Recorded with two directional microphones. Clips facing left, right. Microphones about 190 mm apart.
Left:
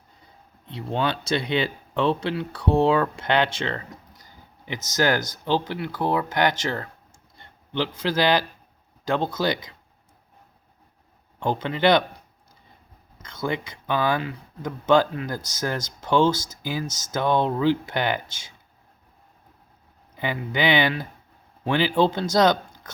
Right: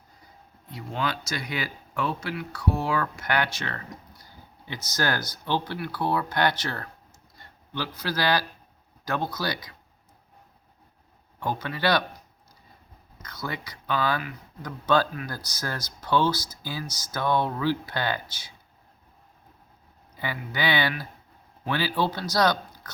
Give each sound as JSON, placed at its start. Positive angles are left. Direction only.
{"t": 0.7, "sound": "speech", "side_deg": 30}
{"t": 4.9, "sound": "speech", "side_deg": 20}
{"t": 11.4, "sound": "speech", "side_deg": 25}
{"t": 13.2, "sound": "speech", "side_deg": 25}
{"t": 20.1, "sound": "speech", "side_deg": 20}